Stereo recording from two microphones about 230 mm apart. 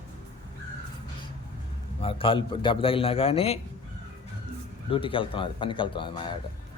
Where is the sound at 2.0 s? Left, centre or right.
Left.